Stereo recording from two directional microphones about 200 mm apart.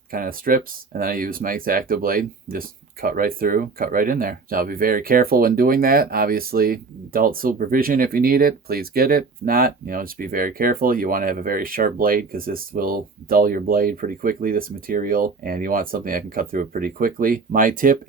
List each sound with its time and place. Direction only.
0.1 s speech: 45° right (ahead or behind)